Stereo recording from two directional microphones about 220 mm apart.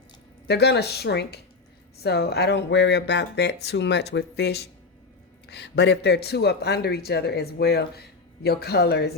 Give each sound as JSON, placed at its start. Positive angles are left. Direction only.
{"t": 0.4, "sound": "speech", "side_deg": 50}